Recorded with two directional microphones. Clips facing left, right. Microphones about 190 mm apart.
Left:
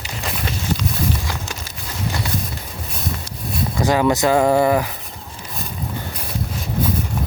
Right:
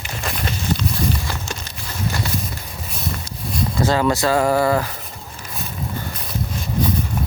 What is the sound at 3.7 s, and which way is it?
Speech, 15° left (ahead or behind).